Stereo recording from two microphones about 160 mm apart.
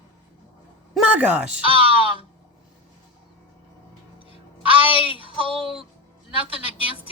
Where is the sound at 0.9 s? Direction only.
10° right (ahead or behind).